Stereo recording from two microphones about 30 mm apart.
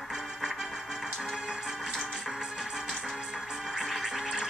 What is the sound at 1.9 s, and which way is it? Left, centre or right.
Music, centre.